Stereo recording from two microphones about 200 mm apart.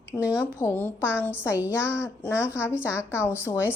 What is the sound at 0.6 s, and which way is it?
Speech, 10° left (ahead or behind).